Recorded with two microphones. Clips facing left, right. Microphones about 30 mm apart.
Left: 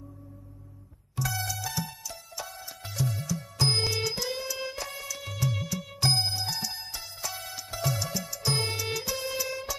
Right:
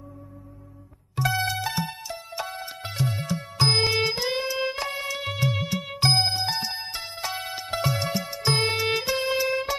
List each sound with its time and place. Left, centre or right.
1.1 s music: right